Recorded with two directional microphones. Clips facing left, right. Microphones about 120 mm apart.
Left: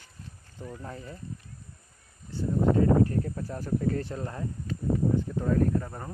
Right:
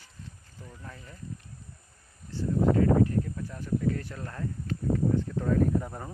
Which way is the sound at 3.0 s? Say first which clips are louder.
Even; 40° left (ahead or behind).